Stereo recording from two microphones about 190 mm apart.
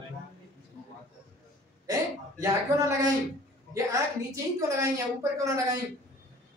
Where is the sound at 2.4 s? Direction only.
15° right (ahead or behind).